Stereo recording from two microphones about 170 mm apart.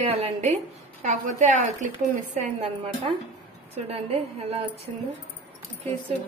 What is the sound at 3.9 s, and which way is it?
A woman's voice, 35° right (ahead or behind).